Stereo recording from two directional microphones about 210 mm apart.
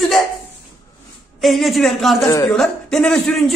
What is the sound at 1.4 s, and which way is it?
Speech, centre (ahead or behind).